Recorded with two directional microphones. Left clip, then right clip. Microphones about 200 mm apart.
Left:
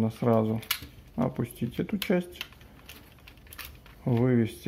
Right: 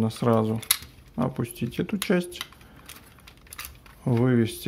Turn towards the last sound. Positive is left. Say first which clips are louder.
# right 3 dB
turn(degrees=-20)  # may be behind; listen again after turning